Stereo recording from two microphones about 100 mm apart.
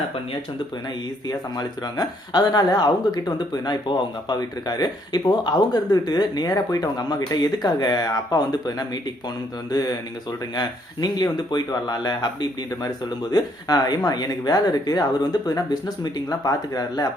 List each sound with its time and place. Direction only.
1.3 s speech: 40° left (ahead or behind)